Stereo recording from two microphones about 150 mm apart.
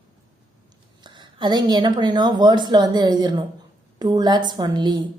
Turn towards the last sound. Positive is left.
turn(degrees=-30)  # may be behind; listen again after turning